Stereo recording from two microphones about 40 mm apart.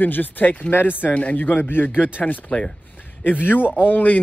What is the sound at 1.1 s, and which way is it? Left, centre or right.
Speech, left.